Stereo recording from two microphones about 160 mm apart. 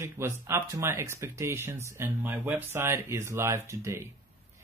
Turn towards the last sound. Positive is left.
turn(degrees=-15)  # may be behind; listen again after turning